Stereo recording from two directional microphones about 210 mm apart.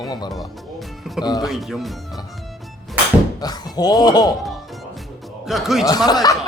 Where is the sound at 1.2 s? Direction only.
20° left (ahead or behind).